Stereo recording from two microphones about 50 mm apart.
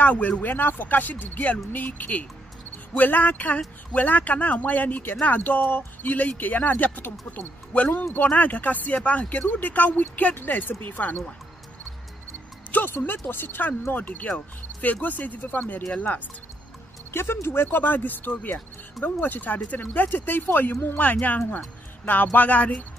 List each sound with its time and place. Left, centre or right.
0.0 s speech: left
8.0 s speech: left
12.7 s speech: left
17.1 s speech: left